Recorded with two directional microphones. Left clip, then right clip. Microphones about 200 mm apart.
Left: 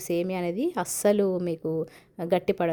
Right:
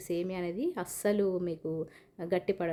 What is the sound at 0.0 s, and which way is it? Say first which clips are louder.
Speech: left 6 dB; 35° left (ahead or behind).